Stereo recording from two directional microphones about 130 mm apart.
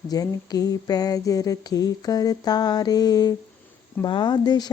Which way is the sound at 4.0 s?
35° left (ahead or behind).